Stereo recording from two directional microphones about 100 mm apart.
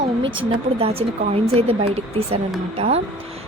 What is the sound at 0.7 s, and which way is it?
Speech, 75° right (ahead or behind).